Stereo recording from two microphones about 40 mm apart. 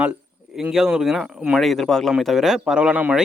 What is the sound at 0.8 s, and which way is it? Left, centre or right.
Speech, centre.